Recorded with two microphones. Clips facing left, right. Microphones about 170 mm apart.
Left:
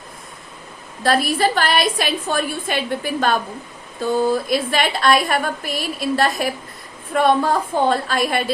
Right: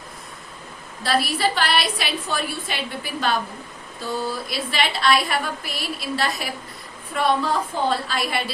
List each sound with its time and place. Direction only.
1.0 s a woman's voice: 50° left (ahead or behind)